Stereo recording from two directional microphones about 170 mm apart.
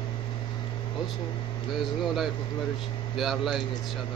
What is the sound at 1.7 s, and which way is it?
Speech, centre (ahead or behind).